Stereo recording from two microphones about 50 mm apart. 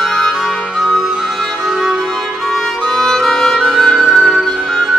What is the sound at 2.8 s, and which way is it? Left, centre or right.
Music, centre.